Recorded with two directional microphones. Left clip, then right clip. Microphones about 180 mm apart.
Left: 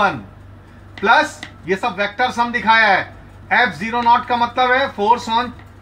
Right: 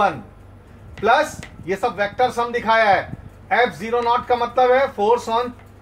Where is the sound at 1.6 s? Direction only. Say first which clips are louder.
Left 2 dB; 30° right (ahead or behind).